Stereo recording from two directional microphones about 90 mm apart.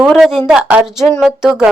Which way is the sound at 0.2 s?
5° right (ahead or behind).